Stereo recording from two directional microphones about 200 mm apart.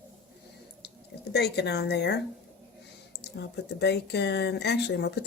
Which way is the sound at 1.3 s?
55° left (ahead or behind).